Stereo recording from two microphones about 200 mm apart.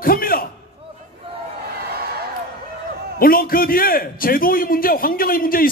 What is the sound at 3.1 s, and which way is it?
A man's voice, 45° left (ahead or behind).